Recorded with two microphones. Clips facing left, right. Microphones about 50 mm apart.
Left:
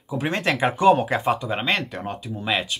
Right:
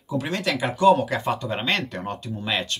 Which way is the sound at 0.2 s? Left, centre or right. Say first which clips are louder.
Left 5 dB; left.